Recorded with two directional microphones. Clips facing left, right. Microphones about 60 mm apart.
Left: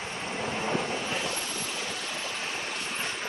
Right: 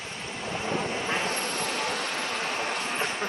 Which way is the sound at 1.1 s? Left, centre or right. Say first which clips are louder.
Right 4 dB; right.